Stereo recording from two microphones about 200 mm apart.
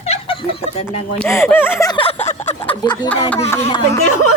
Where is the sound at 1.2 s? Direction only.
Centre (ahead or behind).